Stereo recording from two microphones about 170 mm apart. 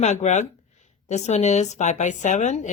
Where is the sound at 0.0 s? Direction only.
45° left (ahead or behind).